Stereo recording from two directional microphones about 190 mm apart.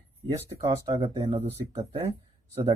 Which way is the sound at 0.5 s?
30° right (ahead or behind).